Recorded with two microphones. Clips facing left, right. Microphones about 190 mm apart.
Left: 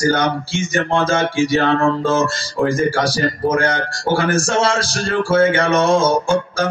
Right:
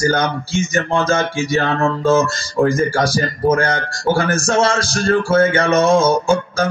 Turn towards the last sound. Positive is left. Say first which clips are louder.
# right 1 dB
turn(degrees=-45)  # may be behind; listen again after turning